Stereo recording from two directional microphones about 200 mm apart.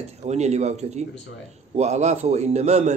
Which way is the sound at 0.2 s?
35° right (ahead or behind).